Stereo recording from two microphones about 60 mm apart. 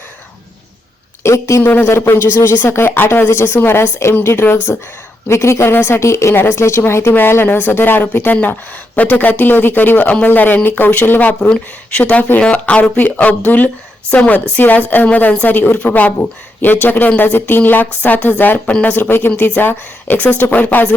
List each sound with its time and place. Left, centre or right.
1.2 s a woman's voice: left
1.6 s speech: left
5.3 s speech: left
7.1 s speech: left
11.3 s speech: centre
11.9 s a woman's voice: left
18.6 s a woman's voice: centre
18.9 s a woman's voice: left